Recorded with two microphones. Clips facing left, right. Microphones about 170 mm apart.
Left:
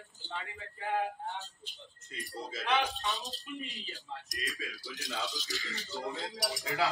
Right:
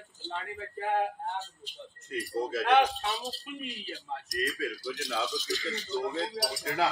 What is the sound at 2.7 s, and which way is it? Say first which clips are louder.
Speech: right 7 dB; 65° right (ahead or behind).